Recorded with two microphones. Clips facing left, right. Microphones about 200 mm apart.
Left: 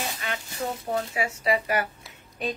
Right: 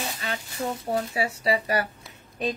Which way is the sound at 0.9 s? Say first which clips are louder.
Right 2 dB; 35° right (ahead or behind).